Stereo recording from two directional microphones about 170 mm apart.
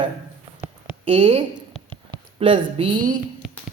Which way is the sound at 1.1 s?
35° right (ahead or behind).